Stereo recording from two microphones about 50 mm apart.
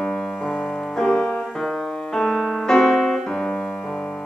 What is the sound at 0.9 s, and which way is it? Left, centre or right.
Music, centre.